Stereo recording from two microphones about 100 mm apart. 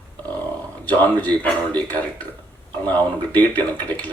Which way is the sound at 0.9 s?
15° left (ahead or behind).